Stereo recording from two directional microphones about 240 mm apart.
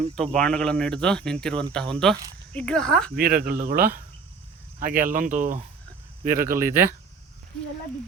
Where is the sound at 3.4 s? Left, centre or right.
Right.